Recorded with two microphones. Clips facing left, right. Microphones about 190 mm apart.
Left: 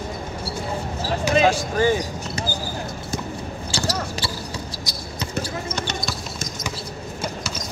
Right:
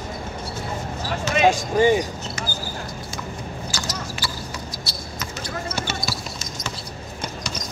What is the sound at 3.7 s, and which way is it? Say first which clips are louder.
Basketball bounce: left 5 dB; 30° left (ahead or behind).